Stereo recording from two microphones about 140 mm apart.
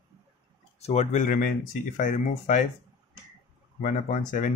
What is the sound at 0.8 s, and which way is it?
Speech, 55° left (ahead or behind).